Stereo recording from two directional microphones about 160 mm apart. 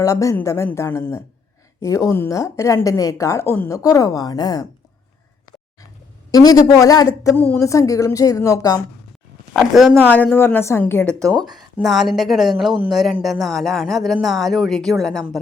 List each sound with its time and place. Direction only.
0.0 s a woman's voice: 20° left (ahead or behind)
6.3 s a woman's voice: 25° left (ahead or behind)
9.5 s a woman's voice: centre (ahead or behind)
11.5 s speech: centre (ahead or behind)